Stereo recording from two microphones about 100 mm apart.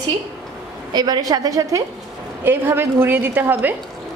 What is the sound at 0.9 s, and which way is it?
Speech, 40° right (ahead or behind).